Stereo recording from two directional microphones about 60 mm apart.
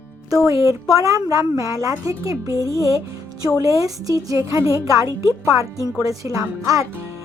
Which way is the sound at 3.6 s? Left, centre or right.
Right.